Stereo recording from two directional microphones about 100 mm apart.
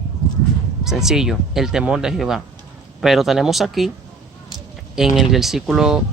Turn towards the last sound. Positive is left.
turn(degrees=-5)  # may be behind; listen again after turning